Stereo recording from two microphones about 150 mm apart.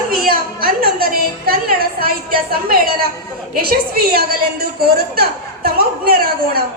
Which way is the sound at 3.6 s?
85° right.